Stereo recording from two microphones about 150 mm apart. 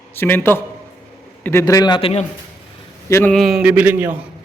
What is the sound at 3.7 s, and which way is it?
Speech, 15° right (ahead or behind).